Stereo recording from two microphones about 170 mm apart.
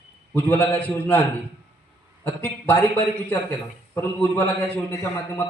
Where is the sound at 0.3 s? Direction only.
10° left (ahead or behind).